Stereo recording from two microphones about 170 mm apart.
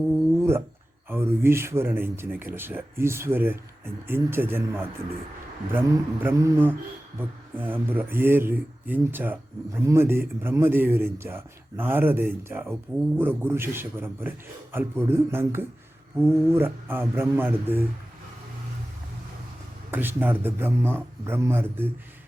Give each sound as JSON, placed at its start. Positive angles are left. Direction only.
{"t": 1.1, "sound": "speech", "side_deg": -15}
{"t": 19.9, "sound": "speech", "side_deg": -10}